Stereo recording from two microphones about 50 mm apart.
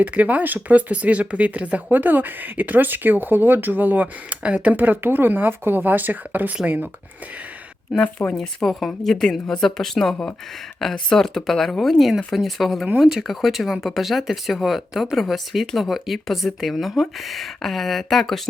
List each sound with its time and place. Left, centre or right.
0.0 s speech: right
2.0 s speech: right
8.4 s a woman's voice: centre